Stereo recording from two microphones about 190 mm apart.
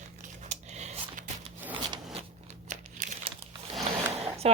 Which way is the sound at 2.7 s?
40° right (ahead or behind).